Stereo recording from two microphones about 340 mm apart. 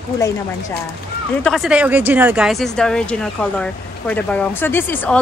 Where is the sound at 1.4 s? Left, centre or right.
Centre.